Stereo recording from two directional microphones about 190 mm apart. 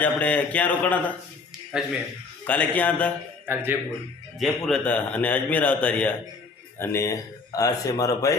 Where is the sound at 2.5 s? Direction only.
10° left (ahead or behind).